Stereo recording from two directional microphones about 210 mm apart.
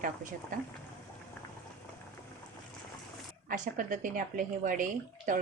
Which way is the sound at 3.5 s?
40° right (ahead or behind).